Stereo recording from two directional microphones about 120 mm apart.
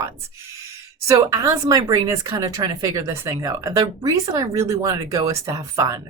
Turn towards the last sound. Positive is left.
turn(degrees=-25)  # may be behind; listen again after turning